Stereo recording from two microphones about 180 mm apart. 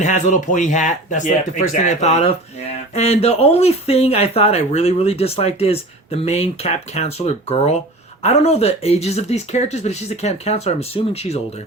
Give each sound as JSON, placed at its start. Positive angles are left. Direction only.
{"t": 0.0, "sound": "speech", "side_deg": 45}